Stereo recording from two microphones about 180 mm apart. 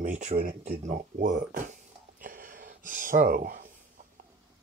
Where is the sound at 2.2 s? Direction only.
50° right (ahead or behind).